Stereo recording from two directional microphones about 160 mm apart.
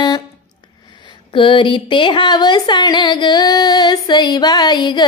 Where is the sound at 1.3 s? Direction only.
30° left (ahead or behind).